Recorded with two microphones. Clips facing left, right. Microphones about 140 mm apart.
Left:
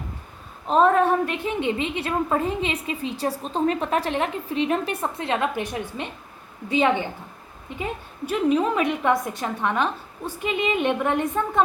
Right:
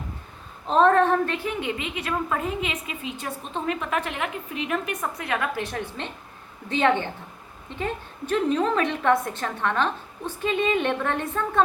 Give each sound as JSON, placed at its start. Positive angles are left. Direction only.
{"t": 0.7, "sound": "a woman's voice", "side_deg": 10}